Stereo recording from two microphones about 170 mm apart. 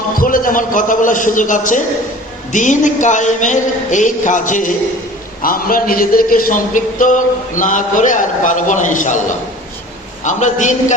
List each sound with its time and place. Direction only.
0.2 s a man's voice: 55° left (ahead or behind)
10.2 s a man's voice: 45° left (ahead or behind)